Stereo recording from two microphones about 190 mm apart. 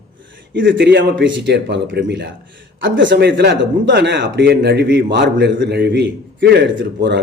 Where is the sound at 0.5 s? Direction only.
70° right (ahead or behind).